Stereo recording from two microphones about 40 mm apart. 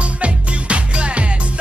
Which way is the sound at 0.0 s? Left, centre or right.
Right.